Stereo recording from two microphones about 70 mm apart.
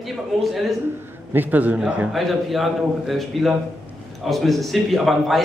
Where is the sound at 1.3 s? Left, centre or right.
Right.